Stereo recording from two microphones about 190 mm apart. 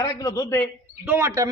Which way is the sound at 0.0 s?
20° left (ahead or behind).